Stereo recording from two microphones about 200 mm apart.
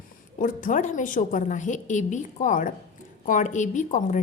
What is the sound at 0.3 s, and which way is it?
A woman's voice, 40° left (ahead or behind).